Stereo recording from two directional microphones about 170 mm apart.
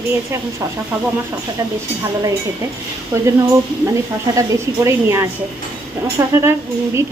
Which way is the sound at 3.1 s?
20° right (ahead or behind).